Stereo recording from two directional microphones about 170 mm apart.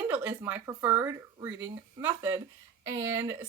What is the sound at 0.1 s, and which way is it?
Speech, 10° right (ahead or behind).